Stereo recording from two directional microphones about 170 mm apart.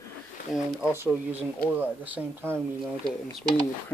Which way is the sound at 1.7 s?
10° right (ahead or behind).